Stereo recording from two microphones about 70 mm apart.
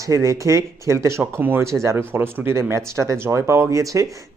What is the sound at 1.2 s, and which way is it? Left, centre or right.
Speech, right.